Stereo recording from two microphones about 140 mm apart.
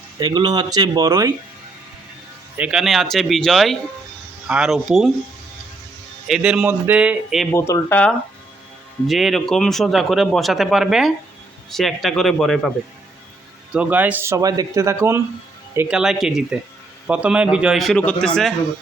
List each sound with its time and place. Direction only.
0.2 s speech: 30° right (ahead or behind)
2.6 s speech: 5° right (ahead or behind)
6.2 s speech: 5° right (ahead or behind)
7.5 s speech: 20° left (ahead or behind)
9.0 s speech: centre (ahead or behind)
13.7 s speech: 10° right (ahead or behind)
15.9 s speech: 5° right (ahead or behind)